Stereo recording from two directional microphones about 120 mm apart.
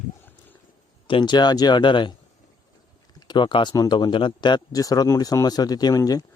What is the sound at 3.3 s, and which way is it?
Speech, 45° left (ahead or behind).